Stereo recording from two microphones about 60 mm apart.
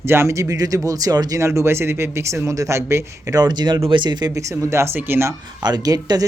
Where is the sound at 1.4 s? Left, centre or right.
Right.